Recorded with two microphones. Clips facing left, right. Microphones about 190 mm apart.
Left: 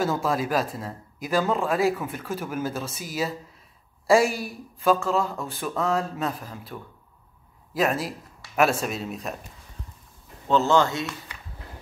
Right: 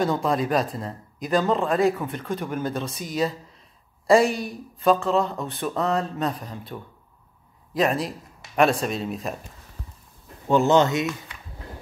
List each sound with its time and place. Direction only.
0.0 s speech: 5° left (ahead or behind)
10.5 s speech: 20° right (ahead or behind)